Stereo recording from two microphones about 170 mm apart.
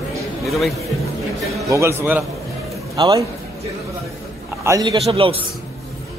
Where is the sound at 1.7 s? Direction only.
15° right (ahead or behind).